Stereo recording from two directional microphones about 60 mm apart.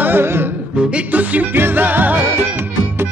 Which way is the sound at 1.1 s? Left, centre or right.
Right.